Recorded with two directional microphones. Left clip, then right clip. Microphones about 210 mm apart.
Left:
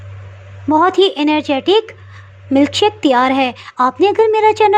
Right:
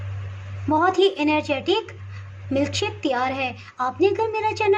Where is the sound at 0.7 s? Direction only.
30° left (ahead or behind).